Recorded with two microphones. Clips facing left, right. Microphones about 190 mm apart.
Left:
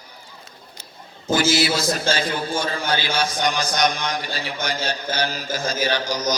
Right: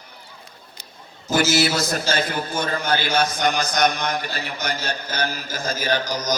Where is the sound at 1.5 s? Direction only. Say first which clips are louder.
Even; 55° right (ahead or behind).